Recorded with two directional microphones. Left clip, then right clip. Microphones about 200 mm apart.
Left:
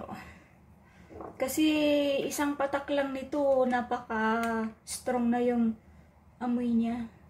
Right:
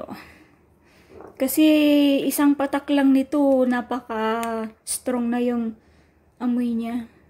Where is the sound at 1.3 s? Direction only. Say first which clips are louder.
Right 10 dB; 50° right (ahead or behind).